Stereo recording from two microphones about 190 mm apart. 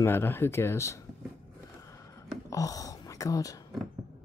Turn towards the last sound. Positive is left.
turn(degrees=20)  # may be behind; listen again after turning